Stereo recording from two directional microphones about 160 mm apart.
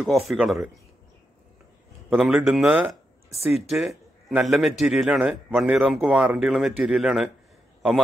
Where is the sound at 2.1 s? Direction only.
10° right (ahead or behind).